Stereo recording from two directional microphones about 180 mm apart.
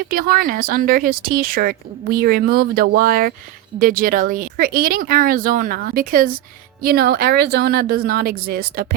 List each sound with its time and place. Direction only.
0.0 s speech: 55° right (ahead or behind)